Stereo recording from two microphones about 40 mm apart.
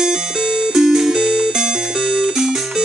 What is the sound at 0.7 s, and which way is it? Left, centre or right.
Music, centre.